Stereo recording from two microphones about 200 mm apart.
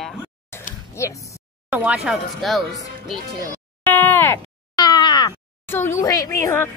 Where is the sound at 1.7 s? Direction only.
5° right (ahead or behind).